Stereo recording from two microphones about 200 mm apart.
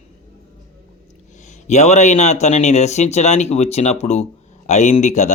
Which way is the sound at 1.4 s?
35° left (ahead or behind).